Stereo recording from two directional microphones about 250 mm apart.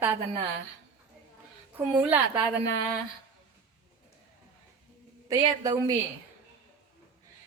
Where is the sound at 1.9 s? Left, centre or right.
Centre.